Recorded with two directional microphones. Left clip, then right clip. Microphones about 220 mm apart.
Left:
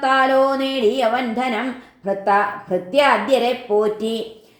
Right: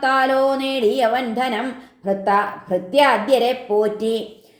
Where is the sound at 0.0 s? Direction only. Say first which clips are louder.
Left 1 dB; 35° right (ahead or behind).